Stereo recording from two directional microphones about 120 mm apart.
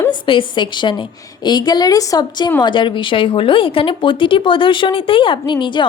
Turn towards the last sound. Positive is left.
turn(degrees=40)  # may be behind; listen again after turning